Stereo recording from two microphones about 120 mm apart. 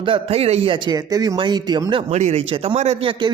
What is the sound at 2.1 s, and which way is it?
Speech, 70° right (ahead or behind).